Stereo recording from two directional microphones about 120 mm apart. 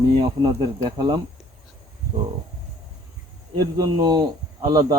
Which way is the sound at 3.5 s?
30° right (ahead or behind).